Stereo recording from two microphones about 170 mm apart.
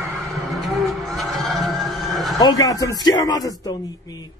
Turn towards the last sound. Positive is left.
turn(degrees=20)  # may be behind; listen again after turning